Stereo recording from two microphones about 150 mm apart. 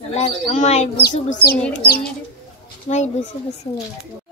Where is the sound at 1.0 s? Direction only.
75° left (ahead or behind).